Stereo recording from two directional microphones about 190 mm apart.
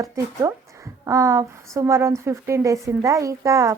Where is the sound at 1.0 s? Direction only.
15° right (ahead or behind).